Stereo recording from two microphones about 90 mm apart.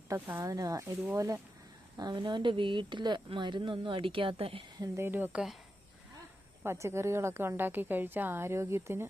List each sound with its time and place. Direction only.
0.3 s speech: 35° right (ahead or behind)
2.0 s a woman's voice: 55° right (ahead or behind); by 4.6 s 85° right
4.9 s speech: 25° right (ahead or behind)
5.3 s speech: 5° right (ahead or behind)
6.6 s speech: 30° right (ahead or behind)